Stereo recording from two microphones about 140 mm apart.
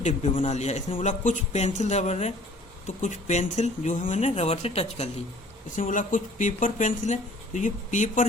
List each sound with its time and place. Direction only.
0.0 s speech: 60° left (ahead or behind)
0.9 s speech: 65° left (ahead or behind); by 5.0 s 45° left (ahead or behind)
5.7 s speech: 70° left (ahead or behind)